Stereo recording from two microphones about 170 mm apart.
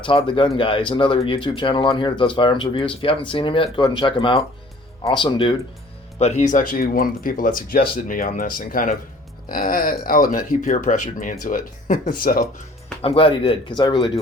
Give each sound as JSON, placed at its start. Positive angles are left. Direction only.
{"t": 0.0, "sound": "speech", "side_deg": 30}
{"t": 6.1, "sound": "speech", "side_deg": 40}
{"t": 13.0, "sound": "speech", "side_deg": 35}